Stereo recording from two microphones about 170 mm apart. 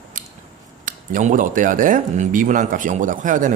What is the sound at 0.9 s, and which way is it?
Speech, 50° right (ahead or behind).